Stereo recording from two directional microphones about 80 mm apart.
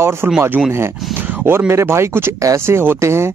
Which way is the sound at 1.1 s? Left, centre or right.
Right.